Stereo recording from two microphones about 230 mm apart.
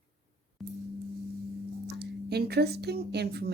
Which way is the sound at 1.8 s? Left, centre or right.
Right.